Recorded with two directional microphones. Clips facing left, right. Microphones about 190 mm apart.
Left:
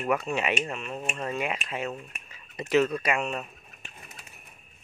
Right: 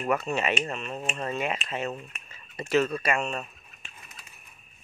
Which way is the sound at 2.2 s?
15° left (ahead or behind).